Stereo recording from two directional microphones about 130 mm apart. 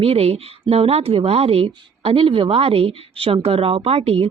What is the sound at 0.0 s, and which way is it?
A woman's voice, 50° right (ahead or behind).